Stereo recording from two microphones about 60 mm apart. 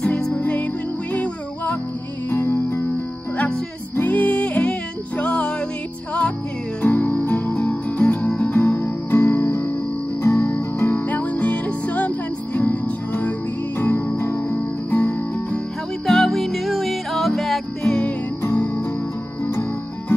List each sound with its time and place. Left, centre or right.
0.4 s music: left
2.2 s music: left
3.9 s music: left
6.8 s music: left
8.7 s music: left
10.2 s music: left
10.9 s music: left
14.6 s music: left
16.1 s music: centre
18.4 s music: left